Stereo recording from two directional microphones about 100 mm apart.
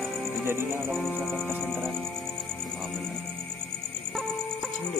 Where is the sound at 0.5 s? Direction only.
25° right (ahead or behind).